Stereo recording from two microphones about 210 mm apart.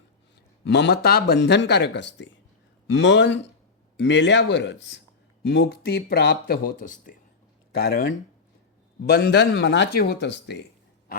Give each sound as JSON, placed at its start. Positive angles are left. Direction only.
{"t": 0.6, "sound": "speech", "side_deg": 55}